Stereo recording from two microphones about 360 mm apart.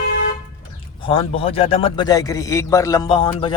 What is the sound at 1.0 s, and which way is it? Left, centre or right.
A man's voice, centre.